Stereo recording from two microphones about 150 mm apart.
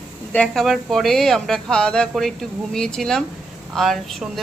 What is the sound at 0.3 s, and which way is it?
A woman's voice, 5° left (ahead or behind).